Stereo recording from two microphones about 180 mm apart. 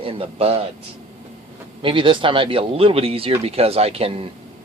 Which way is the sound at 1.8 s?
30° right (ahead or behind).